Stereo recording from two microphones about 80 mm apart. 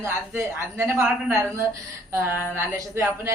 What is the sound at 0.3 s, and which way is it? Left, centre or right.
Speech, right.